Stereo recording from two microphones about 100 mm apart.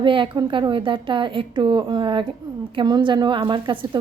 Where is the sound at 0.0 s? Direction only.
55° right (ahead or behind).